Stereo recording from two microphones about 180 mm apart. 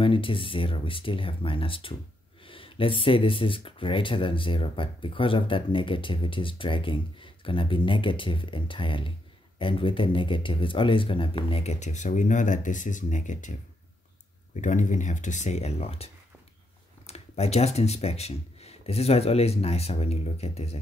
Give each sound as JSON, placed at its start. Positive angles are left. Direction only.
{"t": 0.0, "sound": "speech", "side_deg": 30}